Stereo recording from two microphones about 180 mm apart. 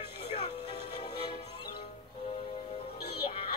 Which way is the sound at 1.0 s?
30° left (ahead or behind).